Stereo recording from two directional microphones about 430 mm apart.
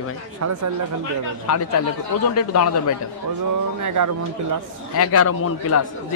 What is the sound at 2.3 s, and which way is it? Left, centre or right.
Speech, left.